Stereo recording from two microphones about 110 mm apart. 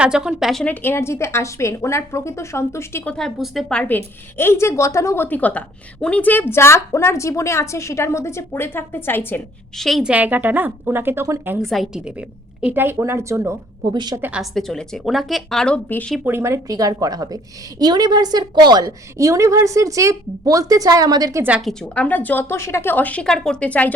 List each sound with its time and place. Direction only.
0.0 s a woman's voice: 5° right (ahead or behind)
0.6 s a woman's voice: 15° left (ahead or behind)
3.0 s a woman's voice: 10° left (ahead or behind)
9.7 s a woman's voice: 5° left (ahead or behind)
10.0 s a woman's voice: 10° right (ahead or behind)
11.6 s a woman's voice: centre (ahead or behind)
12.6 s speech: 20° right (ahead or behind)
13.9 s a woman's voice: 40° right (ahead or behind)
14.2 s a woman's voice: 10° right (ahead or behind)
14.5 s a woman's voice: 5° left (ahead or behind)
16.2 s a woman's voice: 25° right (ahead or behind); by 18.9 s 40° right (ahead or behind)
18.9 s a woman's voice: 30° right (ahead or behind)
21.9 s a woman's voice: 15° left (ahead or behind)